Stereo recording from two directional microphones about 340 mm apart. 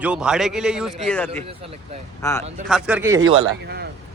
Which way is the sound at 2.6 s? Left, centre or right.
Centre.